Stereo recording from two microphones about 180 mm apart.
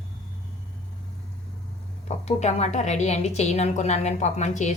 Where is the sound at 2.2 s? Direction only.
40° left (ahead or behind).